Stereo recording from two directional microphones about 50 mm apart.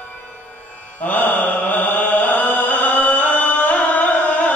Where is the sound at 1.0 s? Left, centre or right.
Left.